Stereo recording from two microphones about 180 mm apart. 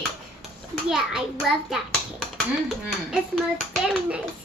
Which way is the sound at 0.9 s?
Centre (ahead or behind).